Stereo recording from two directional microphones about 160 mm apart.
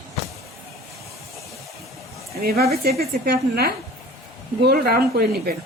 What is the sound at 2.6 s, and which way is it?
Speech, 75° right (ahead or behind).